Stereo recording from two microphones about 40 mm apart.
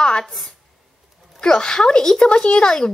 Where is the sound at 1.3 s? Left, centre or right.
Centre.